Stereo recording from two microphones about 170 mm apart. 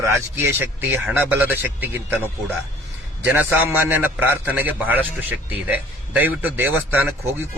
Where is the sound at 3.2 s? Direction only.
10° right (ahead or behind).